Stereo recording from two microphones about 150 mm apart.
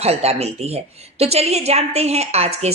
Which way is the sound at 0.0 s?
45° right (ahead or behind).